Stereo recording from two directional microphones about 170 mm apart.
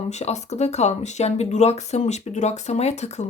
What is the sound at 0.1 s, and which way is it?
Speech, 40° left (ahead or behind).